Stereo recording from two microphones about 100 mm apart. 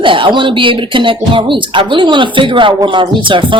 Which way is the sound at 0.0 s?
55° right (ahead or behind).